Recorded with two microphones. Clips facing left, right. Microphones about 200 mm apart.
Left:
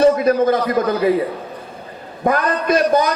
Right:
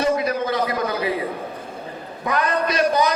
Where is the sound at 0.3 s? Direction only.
50° left (ahead or behind).